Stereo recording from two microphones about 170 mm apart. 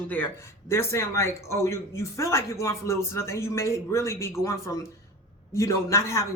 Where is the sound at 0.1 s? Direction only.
15° left (ahead or behind).